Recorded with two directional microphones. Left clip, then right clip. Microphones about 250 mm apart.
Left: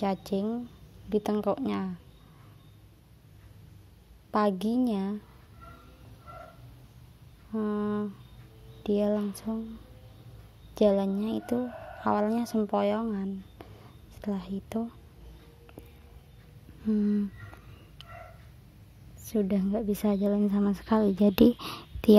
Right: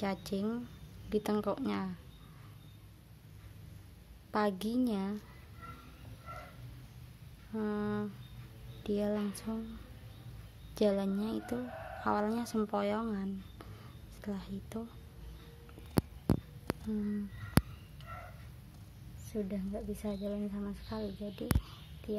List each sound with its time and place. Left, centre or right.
0.0 s a woman's voice: centre
4.3 s a woman's voice: centre
7.5 s a woman's voice: centre
10.7 s speech: centre
19.3 s a woman's voice: left